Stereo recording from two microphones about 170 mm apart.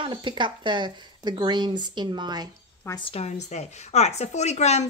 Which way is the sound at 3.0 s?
40° left (ahead or behind).